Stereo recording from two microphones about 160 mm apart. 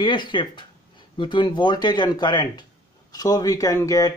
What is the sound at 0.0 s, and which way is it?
Speech, 30° left (ahead or behind).